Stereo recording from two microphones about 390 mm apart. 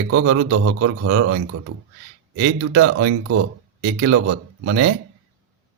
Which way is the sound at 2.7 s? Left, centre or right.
Right.